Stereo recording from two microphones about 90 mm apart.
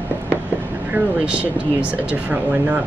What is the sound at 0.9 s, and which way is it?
Speech, 10° right (ahead or behind).